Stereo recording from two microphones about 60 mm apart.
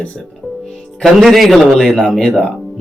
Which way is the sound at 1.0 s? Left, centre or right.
Centre.